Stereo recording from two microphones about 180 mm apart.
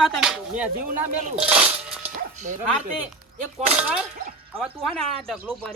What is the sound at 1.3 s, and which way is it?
Music, 5° right (ahead or behind).